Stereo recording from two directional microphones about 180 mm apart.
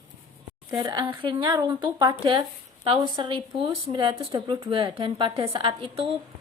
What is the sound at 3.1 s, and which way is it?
A woman's voice, 30° right (ahead or behind).